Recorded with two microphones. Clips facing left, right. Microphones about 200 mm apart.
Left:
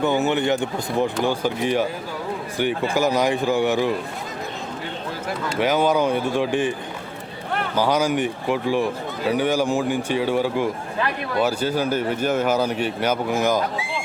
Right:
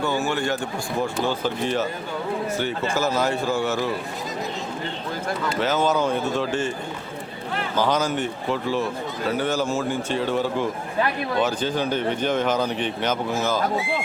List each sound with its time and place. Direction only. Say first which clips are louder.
0.0 s a man's voice: left 4 dB; 20° left (ahead or behind)
5.5 s a man's voice: left 3 dB; 15° left (ahead or behind)
7.8 s a man's voice: left 2 dB; 10° left (ahead or behind)